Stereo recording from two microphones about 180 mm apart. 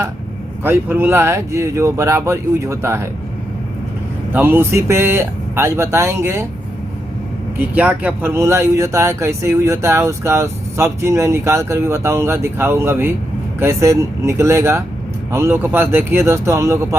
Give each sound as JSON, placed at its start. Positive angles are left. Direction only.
{"t": 0.6, "sound": "speech", "side_deg": -10}
{"t": 4.3, "sound": "speech", "side_deg": -10}
{"t": 7.6, "sound": "speech", "side_deg": -10}